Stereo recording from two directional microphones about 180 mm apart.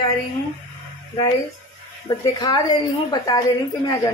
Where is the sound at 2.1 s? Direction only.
20° left (ahead or behind).